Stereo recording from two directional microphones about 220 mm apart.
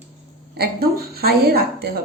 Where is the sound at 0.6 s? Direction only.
45° right (ahead or behind).